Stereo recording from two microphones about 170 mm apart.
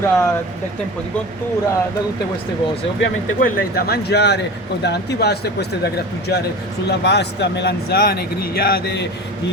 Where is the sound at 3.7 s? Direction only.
70° left (ahead or behind).